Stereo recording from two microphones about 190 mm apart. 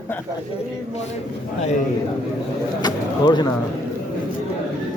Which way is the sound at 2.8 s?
20° left (ahead or behind).